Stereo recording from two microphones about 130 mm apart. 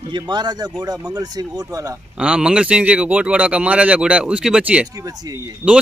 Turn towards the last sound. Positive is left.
turn(degrees=-25)  # may be behind; listen again after turning